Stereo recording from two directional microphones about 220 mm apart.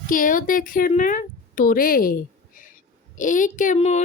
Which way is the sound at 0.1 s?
35° left (ahead or behind).